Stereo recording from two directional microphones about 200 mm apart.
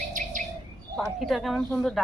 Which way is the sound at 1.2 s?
Centre (ahead or behind).